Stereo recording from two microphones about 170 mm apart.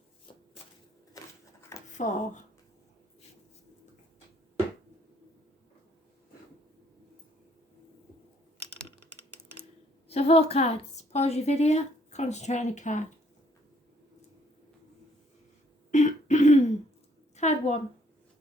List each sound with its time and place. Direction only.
1.2 s typewriter: 20° left (ahead or behind)
2.0 s speech: 45° left (ahead or behind)
10.1 s a woman's voice: 35° left (ahead or behind)
15.9 s throat clearing: 45° left (ahead or behind)
17.3 s a sound: 40° left (ahead or behind)